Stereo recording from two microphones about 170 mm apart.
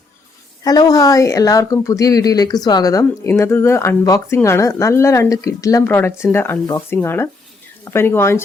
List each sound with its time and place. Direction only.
0.6 s a woman's voice: 20° left (ahead or behind)